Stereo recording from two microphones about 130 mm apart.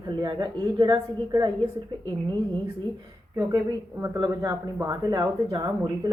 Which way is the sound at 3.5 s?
30° right (ahead or behind).